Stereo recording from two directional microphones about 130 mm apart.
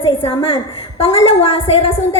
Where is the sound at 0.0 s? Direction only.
45° left (ahead or behind).